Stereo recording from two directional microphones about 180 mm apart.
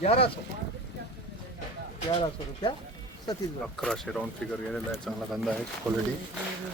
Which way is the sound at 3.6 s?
Centre (ahead or behind).